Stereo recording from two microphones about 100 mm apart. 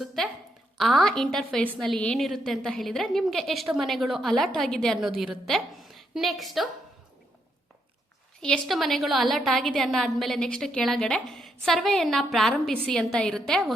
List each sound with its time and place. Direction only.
0.2 s a sound: 5° left (ahead or behind)
0.8 s a woman's voice: centre (ahead or behind)
8.4 s a woman's voice: 10° left (ahead or behind)